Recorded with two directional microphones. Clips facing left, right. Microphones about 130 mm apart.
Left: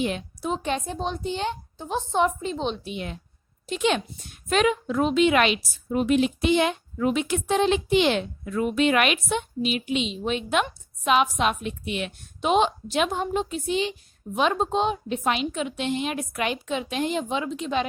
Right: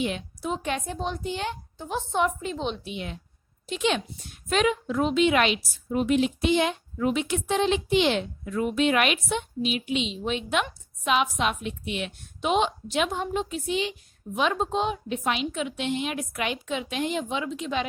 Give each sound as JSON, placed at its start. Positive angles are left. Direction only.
{"t": 0.0, "sound": "a woman's voice", "side_deg": 35}
{"t": 2.8, "sound": "a woman's voice", "side_deg": 45}